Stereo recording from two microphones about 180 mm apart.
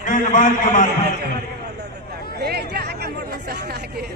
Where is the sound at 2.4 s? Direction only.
65° right (ahead or behind).